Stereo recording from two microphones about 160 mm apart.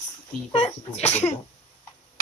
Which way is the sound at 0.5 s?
40° left (ahead or behind).